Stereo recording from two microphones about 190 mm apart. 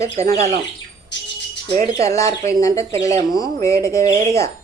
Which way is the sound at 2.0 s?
15° left (ahead or behind).